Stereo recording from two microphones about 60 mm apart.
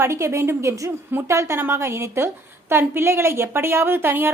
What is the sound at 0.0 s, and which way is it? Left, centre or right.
A woman's voice, right.